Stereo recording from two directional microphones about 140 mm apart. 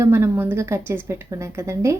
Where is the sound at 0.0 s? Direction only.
15° right (ahead or behind).